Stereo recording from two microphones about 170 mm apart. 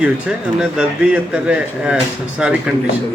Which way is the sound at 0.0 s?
5° right (ahead or behind).